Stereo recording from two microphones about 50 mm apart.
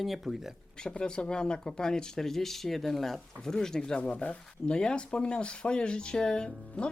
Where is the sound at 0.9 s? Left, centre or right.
Centre.